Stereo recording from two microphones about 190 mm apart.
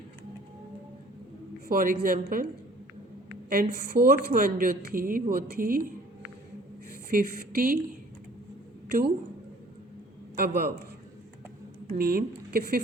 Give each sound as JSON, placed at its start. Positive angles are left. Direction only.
{"t": 1.6, "sound": "a woman's voice", "side_deg": -50}
{"t": 3.5, "sound": "a woman's voice", "side_deg": -55}
{"t": 7.1, "sound": "a woman's voice", "side_deg": -50}
{"t": 10.3, "sound": "a man's voice", "side_deg": -55}
{"t": 11.9, "sound": "a woman's voice", "side_deg": -55}